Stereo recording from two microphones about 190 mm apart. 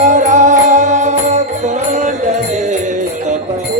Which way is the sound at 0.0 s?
40° right (ahead or behind).